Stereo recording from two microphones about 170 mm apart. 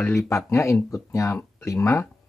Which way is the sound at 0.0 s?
15° left (ahead or behind).